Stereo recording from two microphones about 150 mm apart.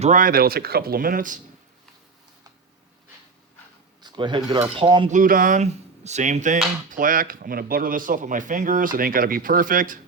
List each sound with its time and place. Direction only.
0.0 s speech: 60° right (ahead or behind)
4.0 s a sound: 30° right (ahead or behind)
4.8 s cutlery: 35° right (ahead or behind)
5.0 s speech: 60° right (ahead or behind)